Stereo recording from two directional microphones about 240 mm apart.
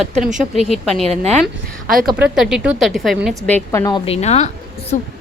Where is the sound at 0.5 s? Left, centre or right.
Centre.